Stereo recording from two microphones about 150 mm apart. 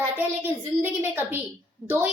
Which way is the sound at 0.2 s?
15° right (ahead or behind).